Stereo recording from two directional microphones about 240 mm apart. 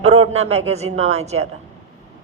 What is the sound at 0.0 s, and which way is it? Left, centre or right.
A woman's voice, right.